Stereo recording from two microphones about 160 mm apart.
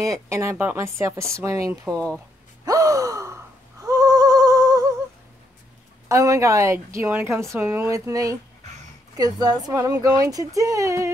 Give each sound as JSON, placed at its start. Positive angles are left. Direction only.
{"t": 0.0, "sound": "speech", "side_deg": -20}
{"t": 2.6, "sound": "gasp", "side_deg": -20}
{"t": 3.8, "sound": "a sound", "side_deg": -20}
{"t": 6.0, "sound": "a woman's voice", "side_deg": -20}